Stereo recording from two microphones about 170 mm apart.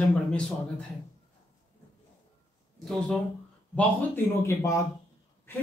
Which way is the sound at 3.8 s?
15° left (ahead or behind).